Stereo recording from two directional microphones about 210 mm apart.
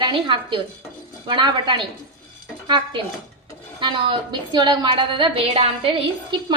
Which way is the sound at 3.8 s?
20° right (ahead or behind).